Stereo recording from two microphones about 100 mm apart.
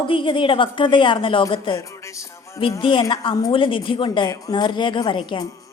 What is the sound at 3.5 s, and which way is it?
Speech, 55° left (ahead or behind).